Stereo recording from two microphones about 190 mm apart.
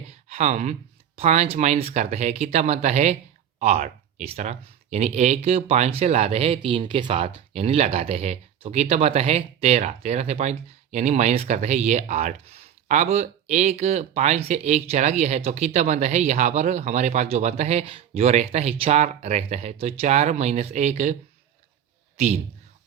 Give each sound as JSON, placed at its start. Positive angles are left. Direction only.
{"t": 0.1, "sound": "speech", "side_deg": -35}